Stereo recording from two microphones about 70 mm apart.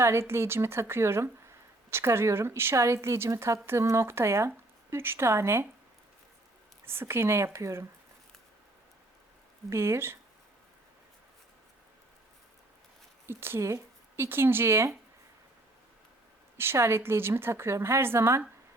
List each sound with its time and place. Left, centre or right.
0.0 s a woman's voice: right
6.8 s a woman's voice: right
9.6 s a woman's voice: right
13.2 s speech: right
16.6 s a woman's voice: right